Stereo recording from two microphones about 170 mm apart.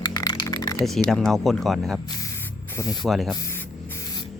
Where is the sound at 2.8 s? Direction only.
20° left (ahead or behind).